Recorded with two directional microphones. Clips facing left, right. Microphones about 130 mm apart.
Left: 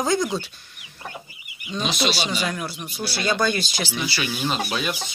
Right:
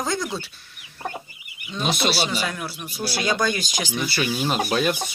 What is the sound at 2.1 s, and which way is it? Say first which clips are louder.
Speech: right 1 dB; 5° right (ahead or behind).